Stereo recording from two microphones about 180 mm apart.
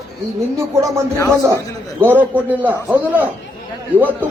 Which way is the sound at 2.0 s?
10° right (ahead or behind).